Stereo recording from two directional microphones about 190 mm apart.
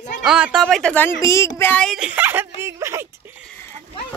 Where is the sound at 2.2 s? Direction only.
10° right (ahead or behind).